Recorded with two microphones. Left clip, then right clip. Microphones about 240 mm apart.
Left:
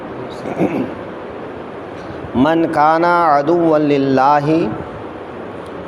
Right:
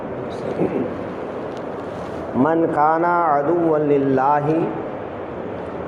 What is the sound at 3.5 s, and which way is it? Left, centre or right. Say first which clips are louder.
Speech: left 4 dB; left.